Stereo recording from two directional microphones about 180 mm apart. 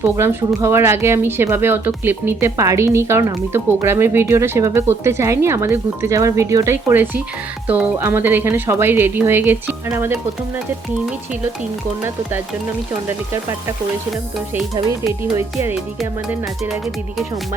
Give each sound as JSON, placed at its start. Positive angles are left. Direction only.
{"t": 0.0, "sound": "speech", "side_deg": -15}
{"t": 14.5, "sound": "speech", "side_deg": -15}